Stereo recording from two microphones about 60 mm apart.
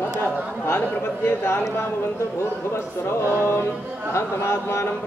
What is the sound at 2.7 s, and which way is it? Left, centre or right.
Speech, left.